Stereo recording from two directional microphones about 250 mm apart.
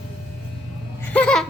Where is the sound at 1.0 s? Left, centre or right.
Centre.